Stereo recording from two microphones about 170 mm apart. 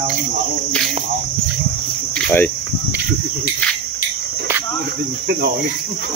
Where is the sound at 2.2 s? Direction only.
10° left (ahead or behind).